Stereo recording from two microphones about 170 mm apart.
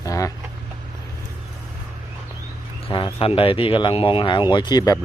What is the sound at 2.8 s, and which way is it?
Speech, 30° left (ahead or behind).